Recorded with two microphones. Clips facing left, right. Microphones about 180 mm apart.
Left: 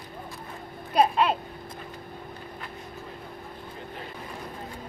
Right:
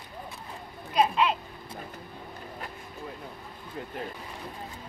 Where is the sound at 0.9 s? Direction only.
50° left (ahead or behind).